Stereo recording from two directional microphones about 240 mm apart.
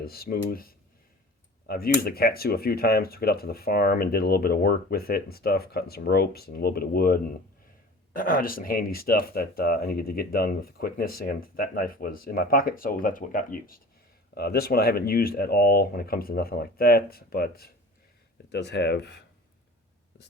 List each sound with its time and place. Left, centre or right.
0.0 s speech: left